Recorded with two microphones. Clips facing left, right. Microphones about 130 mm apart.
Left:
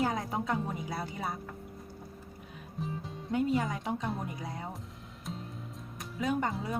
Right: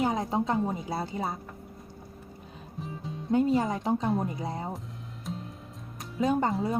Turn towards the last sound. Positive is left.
turn(degrees=-30)  # may be behind; listen again after turning